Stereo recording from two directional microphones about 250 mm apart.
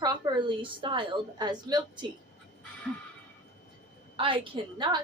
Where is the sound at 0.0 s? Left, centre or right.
Centre.